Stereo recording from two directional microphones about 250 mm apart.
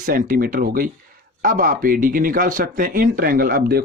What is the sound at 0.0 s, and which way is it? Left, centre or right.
Speech, right.